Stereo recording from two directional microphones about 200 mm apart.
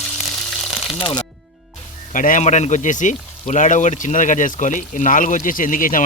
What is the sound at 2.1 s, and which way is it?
Speech, 40° left (ahead or behind).